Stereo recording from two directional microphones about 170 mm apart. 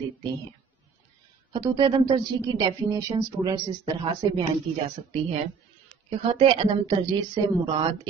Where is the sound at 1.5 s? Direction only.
25° right (ahead or behind).